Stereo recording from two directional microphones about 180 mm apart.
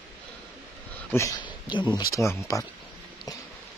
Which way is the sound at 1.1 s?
15° left (ahead or behind).